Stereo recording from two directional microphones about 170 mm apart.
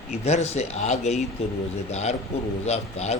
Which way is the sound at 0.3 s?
40° left (ahead or behind).